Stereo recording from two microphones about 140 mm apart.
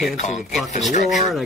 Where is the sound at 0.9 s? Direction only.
55° left (ahead or behind).